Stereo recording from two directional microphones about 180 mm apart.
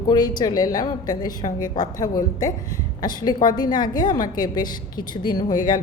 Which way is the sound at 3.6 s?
25° left (ahead or behind).